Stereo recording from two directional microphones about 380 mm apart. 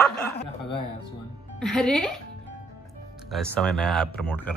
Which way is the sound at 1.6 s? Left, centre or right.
Centre.